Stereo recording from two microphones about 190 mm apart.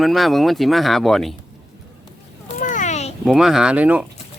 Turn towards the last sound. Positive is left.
turn(degrees=-10)  # may be behind; listen again after turning